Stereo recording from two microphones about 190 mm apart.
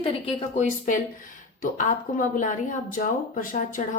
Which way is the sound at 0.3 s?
30° left (ahead or behind).